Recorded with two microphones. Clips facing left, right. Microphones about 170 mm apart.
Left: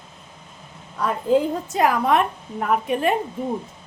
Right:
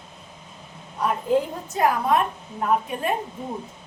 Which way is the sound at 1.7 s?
90° left.